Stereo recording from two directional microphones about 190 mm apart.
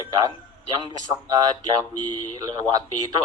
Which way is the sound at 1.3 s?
20° right (ahead or behind).